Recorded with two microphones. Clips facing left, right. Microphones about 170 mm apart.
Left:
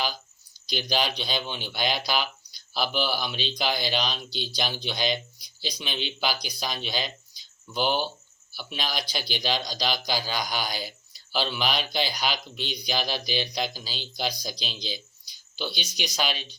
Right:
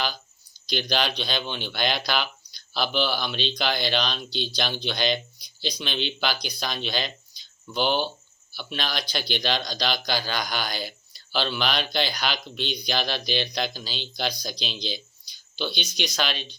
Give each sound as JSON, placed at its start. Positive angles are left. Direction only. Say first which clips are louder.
{"t": 0.7, "sound": "speech", "louder": "right 1 dB", "side_deg": 10}